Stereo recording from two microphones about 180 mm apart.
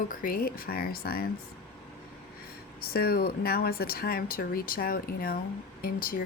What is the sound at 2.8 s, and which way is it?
Speech, 60° left (ahead or behind).